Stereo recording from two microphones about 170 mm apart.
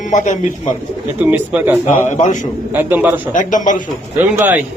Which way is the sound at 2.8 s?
10° right (ahead or behind).